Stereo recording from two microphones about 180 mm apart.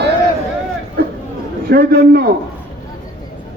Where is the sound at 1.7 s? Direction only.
55° right (ahead or behind).